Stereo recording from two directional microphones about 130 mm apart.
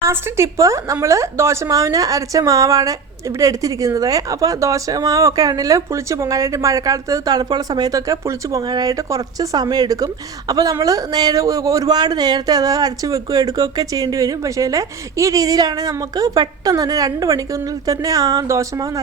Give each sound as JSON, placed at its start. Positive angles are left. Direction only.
{"t": 0.0, "sound": "a woman's voice", "side_deg": -20}